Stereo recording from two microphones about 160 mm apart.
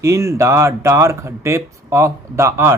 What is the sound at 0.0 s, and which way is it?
Speech, 20° right (ahead or behind).